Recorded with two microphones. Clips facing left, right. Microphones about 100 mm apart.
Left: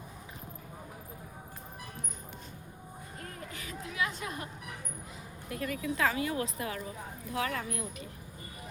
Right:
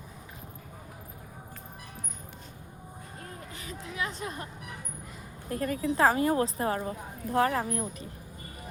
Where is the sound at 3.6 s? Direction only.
30° right (ahead or behind).